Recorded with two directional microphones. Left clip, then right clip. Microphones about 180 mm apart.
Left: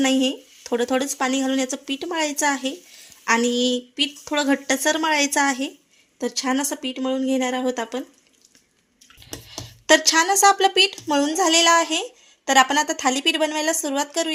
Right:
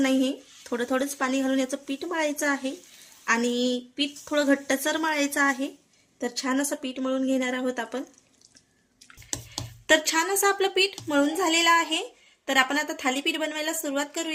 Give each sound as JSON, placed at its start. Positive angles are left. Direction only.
{"t": 0.0, "sound": "speech", "side_deg": 40}
{"t": 10.2, "sound": "speech", "side_deg": 35}